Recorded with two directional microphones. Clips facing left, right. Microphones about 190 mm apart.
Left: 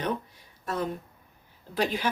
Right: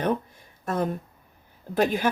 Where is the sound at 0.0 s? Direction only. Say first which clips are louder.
Right 5 dB; 50° right (ahead or behind).